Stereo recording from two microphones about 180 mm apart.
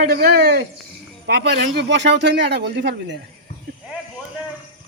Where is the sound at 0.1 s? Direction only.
60° right (ahead or behind).